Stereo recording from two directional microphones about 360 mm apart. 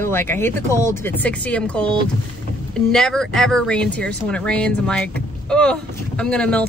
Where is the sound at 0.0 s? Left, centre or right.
Centre.